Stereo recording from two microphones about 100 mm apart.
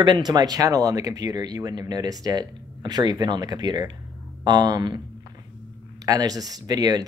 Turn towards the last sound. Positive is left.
turn(degrees=-40)  # may be behind; listen again after turning